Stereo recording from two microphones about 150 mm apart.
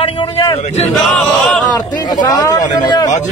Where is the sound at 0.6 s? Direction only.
50° left (ahead or behind).